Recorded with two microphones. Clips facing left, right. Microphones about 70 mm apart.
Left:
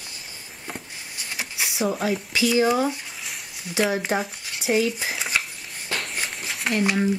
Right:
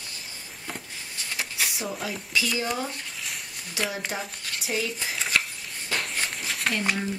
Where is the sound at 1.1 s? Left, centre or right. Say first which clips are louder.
Even; centre.